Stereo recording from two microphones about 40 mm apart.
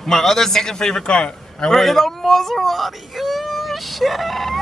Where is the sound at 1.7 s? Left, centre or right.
Centre.